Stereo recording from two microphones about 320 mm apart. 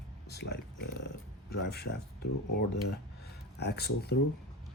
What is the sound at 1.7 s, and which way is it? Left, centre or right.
Speech, left.